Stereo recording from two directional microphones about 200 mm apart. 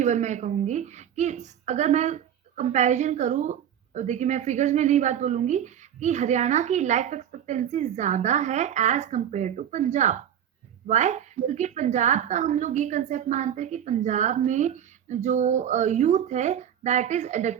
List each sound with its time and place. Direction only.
0.0 s a woman's voice: 35° right (ahead or behind)